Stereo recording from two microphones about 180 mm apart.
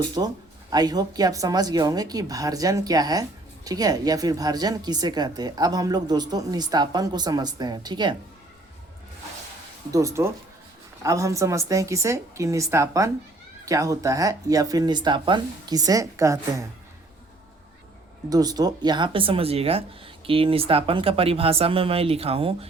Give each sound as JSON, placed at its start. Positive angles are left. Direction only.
{"t": 0.2, "sound": "speech", "side_deg": -25}
{"t": 9.9, "sound": "a woman's voice", "side_deg": -15}
{"t": 18.3, "sound": "speech", "side_deg": -20}